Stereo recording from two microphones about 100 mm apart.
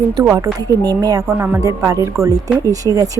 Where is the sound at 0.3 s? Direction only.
35° right (ahead or behind).